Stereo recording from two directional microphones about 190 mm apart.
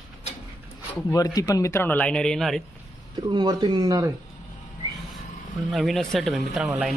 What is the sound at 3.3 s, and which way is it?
Speech, 20° right (ahead or behind).